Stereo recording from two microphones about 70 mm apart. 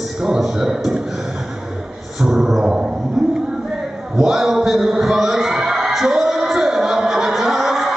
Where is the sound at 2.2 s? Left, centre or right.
Centre.